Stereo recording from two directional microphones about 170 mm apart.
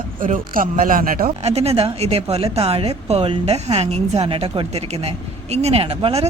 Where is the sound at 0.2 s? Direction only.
55° right (ahead or behind).